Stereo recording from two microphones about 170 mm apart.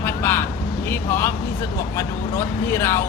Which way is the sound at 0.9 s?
15° left (ahead or behind).